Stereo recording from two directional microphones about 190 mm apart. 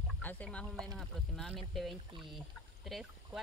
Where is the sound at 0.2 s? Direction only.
10° left (ahead or behind).